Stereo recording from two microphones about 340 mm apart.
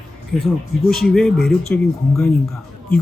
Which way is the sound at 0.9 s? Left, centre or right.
Centre.